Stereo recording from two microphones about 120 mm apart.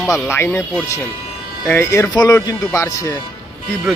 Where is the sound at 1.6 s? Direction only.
20° left (ahead or behind).